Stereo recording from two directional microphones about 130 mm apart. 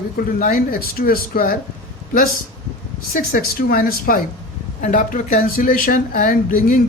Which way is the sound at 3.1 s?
90° left.